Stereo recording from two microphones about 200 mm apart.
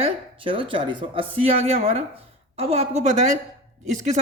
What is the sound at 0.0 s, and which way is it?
A man's voice, 25° right (ahead or behind).